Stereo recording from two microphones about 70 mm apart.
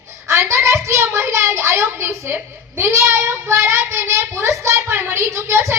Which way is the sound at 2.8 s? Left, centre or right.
Right.